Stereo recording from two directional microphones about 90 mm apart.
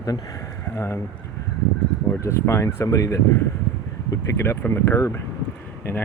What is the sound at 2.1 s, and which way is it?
Speech, 30° left (ahead or behind).